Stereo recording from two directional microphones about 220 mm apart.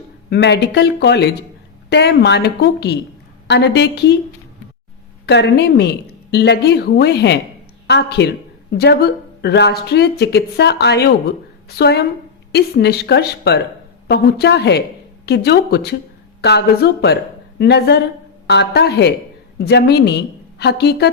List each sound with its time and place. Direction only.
0.3 s speech: 50° left (ahead or behind)
5.2 s a woman's voice: 50° left (ahead or behind)